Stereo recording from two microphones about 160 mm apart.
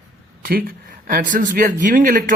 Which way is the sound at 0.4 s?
60° right (ahead or behind).